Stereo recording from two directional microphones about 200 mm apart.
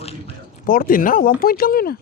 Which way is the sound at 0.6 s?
45° left (ahead or behind).